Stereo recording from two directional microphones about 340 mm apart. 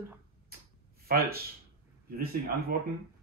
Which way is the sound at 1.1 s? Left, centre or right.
Right.